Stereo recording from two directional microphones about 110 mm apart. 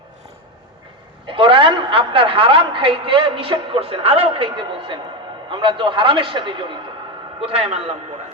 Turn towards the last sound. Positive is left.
turn(degrees=-60)  # may be behind; listen again after turning